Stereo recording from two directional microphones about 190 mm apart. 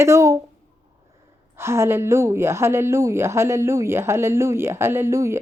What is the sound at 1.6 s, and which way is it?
A woman's voice, 15° right (ahead or behind).